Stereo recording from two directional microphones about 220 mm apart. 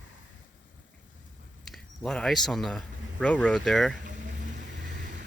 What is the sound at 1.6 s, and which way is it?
Speech, centre (ahead or behind).